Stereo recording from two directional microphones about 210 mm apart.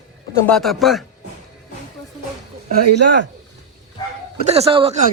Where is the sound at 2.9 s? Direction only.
55° right (ahead or behind).